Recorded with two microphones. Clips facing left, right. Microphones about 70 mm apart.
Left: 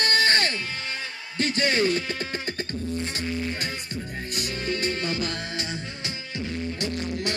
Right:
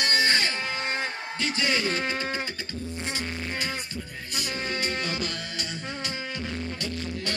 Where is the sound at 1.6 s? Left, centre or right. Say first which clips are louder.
Left 4 dB; left.